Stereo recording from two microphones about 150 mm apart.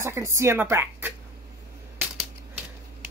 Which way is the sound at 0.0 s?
20° right (ahead or behind).